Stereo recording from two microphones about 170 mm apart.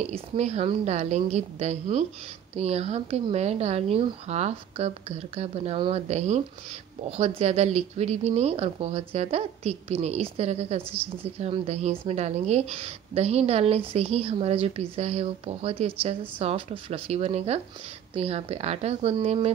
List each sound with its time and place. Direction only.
0.0 s a woman's voice: 40° right (ahead or behind)